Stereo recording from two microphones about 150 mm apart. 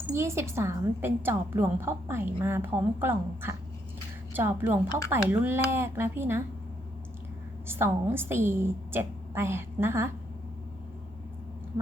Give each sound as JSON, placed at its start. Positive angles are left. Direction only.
{"t": 0.1, "sound": "a woman's voice", "side_deg": -20}
{"t": 7.7, "sound": "a woman's voice", "side_deg": -15}